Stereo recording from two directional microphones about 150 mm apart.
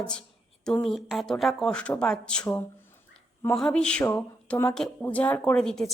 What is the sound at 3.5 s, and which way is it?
A woman's voice, 5° left (ahead or behind).